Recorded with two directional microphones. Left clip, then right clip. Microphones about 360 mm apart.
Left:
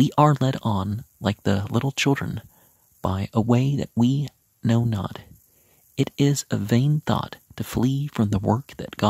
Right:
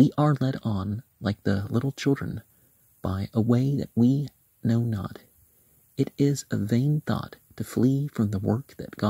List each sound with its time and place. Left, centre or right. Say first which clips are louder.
0.0 s speech: left 4 dB; centre